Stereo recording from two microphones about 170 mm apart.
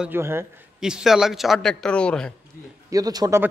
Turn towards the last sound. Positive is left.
turn(degrees=-20)  # may be behind; listen again after turning